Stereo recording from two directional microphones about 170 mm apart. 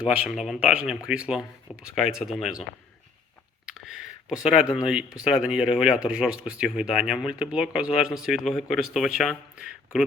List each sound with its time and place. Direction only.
0.0 s speech: 10° right (ahead or behind)
3.7 s a sound: 5° right (ahead or behind)
4.8 s speech: 5° right (ahead or behind)